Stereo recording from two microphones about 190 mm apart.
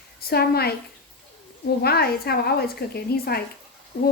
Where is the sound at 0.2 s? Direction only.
55° left (ahead or behind).